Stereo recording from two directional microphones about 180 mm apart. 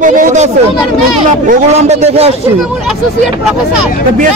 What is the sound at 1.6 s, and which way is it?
Speech, 40° right (ahead or behind).